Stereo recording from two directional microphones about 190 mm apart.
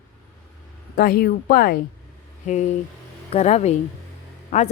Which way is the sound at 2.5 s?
40° left (ahead or behind).